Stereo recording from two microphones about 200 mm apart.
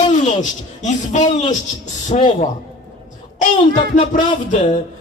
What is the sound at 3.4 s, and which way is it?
Speech, 40° left (ahead or behind).